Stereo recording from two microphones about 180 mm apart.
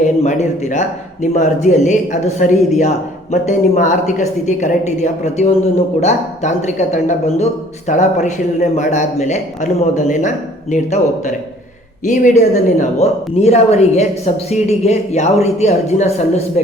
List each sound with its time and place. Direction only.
0.0 s a woman's voice: 40° left (ahead or behind)